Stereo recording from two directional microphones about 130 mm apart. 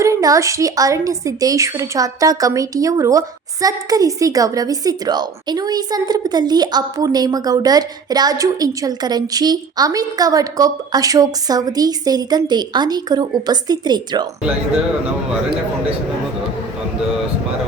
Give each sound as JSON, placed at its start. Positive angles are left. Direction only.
{"t": 0.0, "sound": "a woman's voice", "side_deg": -25}